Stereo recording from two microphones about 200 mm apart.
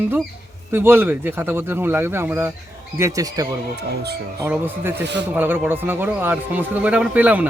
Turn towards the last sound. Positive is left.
turn(degrees=-5)  # may be behind; listen again after turning